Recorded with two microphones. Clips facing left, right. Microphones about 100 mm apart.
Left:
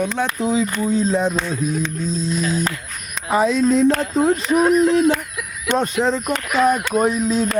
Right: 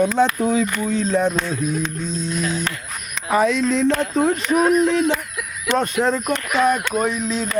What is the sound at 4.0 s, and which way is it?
Speech, centre (ahead or behind).